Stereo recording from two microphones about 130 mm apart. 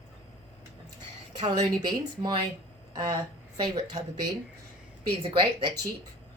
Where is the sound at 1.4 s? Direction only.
35° right (ahead or behind).